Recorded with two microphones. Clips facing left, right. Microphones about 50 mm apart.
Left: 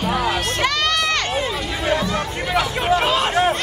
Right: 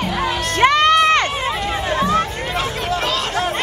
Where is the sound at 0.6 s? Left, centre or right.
Right.